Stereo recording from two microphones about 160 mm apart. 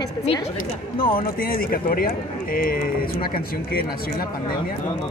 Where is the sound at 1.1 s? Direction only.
65° left (ahead or behind).